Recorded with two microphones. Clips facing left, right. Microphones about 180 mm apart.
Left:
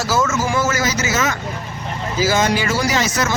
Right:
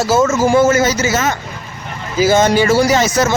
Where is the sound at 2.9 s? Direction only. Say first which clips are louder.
Right 6 dB; 25° right (ahead or behind).